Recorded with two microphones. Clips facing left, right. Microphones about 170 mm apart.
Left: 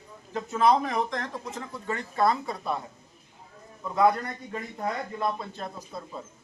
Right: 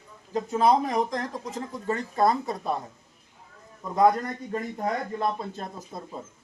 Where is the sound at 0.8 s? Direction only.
35° right (ahead or behind).